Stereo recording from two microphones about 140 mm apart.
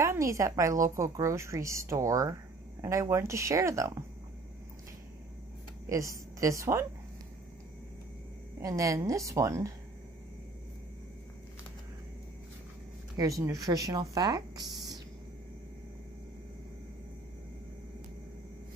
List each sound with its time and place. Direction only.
0.0 s a woman's voice: 20° right (ahead or behind)
5.9 s a woman's voice: 20° right (ahead or behind)
8.5 s a woman's voice: 25° right (ahead or behind)
13.1 s speech: 25° right (ahead or behind)